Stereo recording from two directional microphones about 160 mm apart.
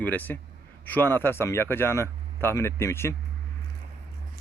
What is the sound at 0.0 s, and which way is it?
Speech, 10° left (ahead or behind).